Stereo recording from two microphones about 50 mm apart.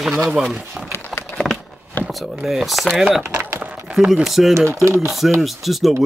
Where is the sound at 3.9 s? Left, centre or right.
Right.